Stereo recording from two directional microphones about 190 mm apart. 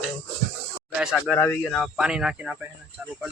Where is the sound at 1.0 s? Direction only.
Centre (ahead or behind).